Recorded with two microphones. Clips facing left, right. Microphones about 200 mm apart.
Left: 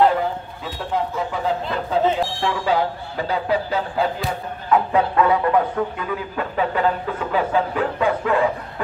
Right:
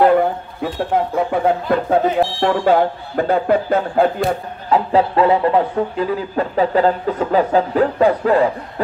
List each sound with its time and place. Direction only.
0.0 s speech: 55° right (ahead or behind)
4.6 s speech: 30° right (ahead or behind)